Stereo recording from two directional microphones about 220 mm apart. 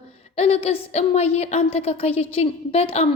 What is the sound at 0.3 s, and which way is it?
A woman's voice, 25° left (ahead or behind).